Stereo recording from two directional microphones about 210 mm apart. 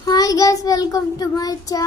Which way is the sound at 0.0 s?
15° left (ahead or behind).